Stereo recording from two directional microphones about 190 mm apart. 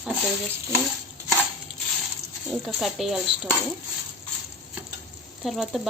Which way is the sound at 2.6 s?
Centre (ahead or behind).